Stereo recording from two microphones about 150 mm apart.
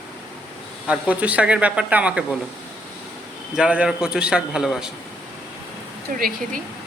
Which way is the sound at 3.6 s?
5° right (ahead or behind).